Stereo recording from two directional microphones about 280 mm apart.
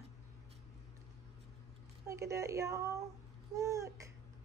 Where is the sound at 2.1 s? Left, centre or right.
Centre.